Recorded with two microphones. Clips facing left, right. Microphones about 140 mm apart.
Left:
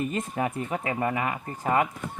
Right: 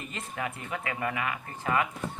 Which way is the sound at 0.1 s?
40° left (ahead or behind).